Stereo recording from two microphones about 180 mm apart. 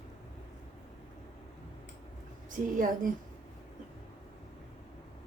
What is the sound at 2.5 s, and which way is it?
Speech, 45° right (ahead or behind).